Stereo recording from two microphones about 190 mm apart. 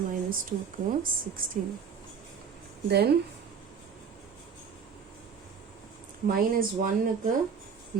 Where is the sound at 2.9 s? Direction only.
60° right (ahead or behind).